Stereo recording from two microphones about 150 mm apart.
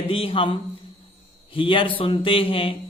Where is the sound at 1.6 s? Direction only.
35° left (ahead or behind).